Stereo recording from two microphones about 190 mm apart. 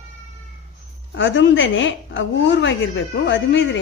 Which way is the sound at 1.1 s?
75° left (ahead or behind).